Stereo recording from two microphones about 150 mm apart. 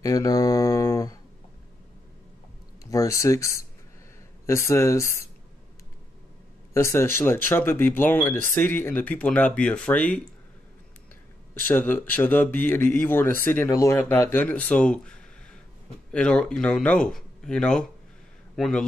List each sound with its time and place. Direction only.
0.0 s mantra: 25° left (ahead or behind)
2.8 s mantra: 20° left (ahead or behind)
6.7 s speech: 20° left (ahead or behind)
11.6 s speech: 15° left (ahead or behind)